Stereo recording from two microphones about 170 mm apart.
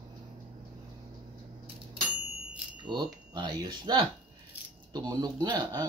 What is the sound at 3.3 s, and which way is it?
Speech, 25° right (ahead or behind).